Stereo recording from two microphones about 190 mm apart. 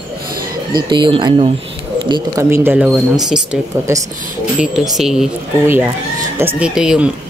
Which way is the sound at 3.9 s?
15° right (ahead or behind).